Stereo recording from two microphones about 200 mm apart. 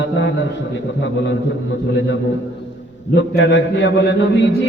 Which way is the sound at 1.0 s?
60° left (ahead or behind).